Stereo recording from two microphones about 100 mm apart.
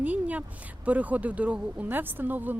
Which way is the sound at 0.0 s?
15° right (ahead or behind).